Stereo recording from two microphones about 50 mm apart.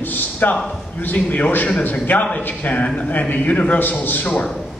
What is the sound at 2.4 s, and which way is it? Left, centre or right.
A man's voice, left.